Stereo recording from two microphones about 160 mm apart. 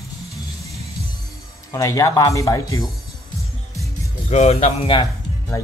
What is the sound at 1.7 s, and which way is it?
Speech, 20° left (ahead or behind).